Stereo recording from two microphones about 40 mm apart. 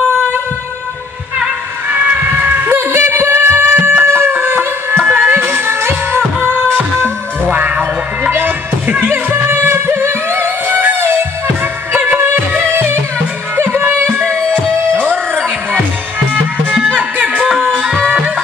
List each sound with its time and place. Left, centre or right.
1.9 s a sound: right
2.7 s music: right
4.0 s chicken: right
5.1 s music: right
7.5 s music: right
8.3 s music: right
11.9 s music: right
12.5 s music: right